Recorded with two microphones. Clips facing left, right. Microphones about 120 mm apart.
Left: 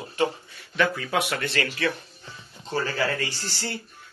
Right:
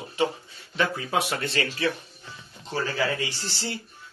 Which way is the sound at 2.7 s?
Centre (ahead or behind).